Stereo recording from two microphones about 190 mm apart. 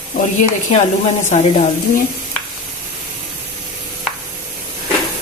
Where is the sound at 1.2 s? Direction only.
35° left (ahead or behind).